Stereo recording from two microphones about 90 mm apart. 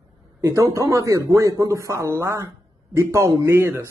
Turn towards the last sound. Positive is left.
turn(degrees=-25)  # may be behind; listen again after turning